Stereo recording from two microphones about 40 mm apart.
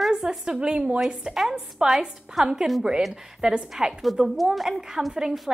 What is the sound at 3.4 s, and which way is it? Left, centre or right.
Speech, centre.